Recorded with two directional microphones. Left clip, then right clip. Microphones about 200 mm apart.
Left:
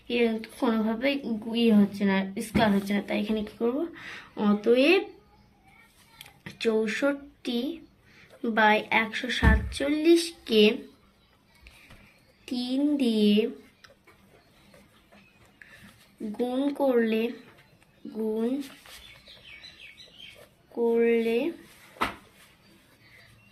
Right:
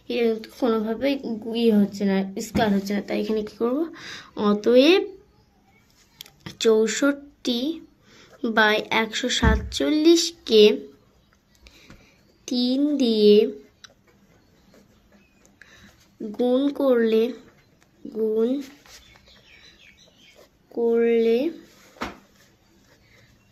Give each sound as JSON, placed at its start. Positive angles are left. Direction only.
{"t": 0.1, "sound": "a woman's voice", "side_deg": -55}
{"t": 6.1, "sound": "a sound", "side_deg": -55}
{"t": 8.2, "sound": "a woman's voice", "side_deg": -55}
{"t": 12.5, "sound": "speech", "side_deg": -55}
{"t": 16.4, "sound": "a woman's voice", "side_deg": -55}
{"t": 20.7, "sound": "a woman's voice", "side_deg": -55}